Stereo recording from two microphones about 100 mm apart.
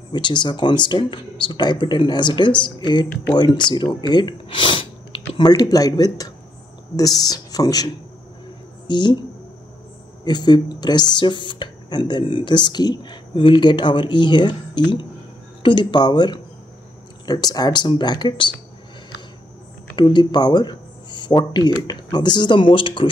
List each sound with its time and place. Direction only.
0.1 s speech: 50° left (ahead or behind)
5.5 s speech: 40° left (ahead or behind)
8.8 s a woman's voice: 50° left (ahead or behind)
10.2 s speech: 45° left (ahead or behind)
20.0 s speech: 50° left (ahead or behind)